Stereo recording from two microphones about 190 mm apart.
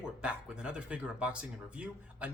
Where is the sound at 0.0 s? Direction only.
5° right (ahead or behind).